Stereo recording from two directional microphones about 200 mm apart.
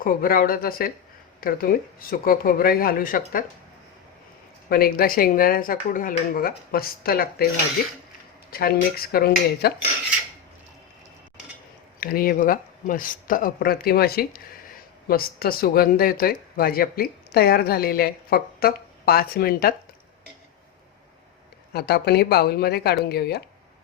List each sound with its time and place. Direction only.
0.0 s speech: 45° left (ahead or behind)
4.7 s speech: 50° left (ahead or behind)
11.9 s speech: 45° left (ahead or behind)
21.7 s speech: 50° left (ahead or behind)